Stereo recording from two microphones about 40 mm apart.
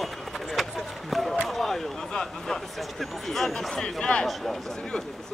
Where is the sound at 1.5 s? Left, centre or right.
Centre.